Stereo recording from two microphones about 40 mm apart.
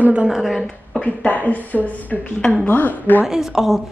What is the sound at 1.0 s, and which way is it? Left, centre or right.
Speech, left.